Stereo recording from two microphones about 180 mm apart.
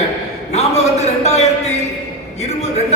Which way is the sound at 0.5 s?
40° left (ahead or behind).